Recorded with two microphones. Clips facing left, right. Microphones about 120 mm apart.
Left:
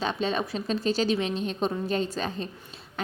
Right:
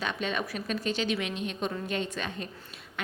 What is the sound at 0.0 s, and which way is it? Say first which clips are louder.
A woman's voice: left 4 dB; 30° left (ahead or behind).